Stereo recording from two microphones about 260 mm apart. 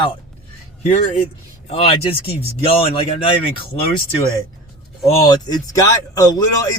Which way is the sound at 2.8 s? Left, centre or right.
Left.